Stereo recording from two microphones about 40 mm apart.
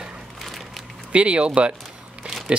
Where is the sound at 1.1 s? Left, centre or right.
Right.